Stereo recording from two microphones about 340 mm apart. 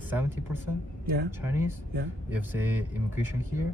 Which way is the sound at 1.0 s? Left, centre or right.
Right.